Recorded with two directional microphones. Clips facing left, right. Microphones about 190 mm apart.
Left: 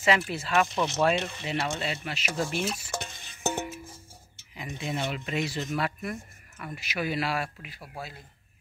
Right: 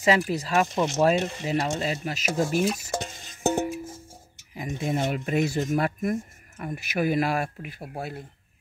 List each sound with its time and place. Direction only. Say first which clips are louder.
0.3 s speech: right 2 dB; 40° right (ahead or behind)
0.7 s speech: right 3 dB; 25° right (ahead or behind)
1.0 s speech: right 4 dB; 40° right (ahead or behind)
3.0 s music: right 6 dB; 40° right (ahead or behind)
4.6 s speech: right 5 dB; 45° right (ahead or behind)